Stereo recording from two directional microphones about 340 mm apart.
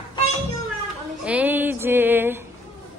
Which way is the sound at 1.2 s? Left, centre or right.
Centre.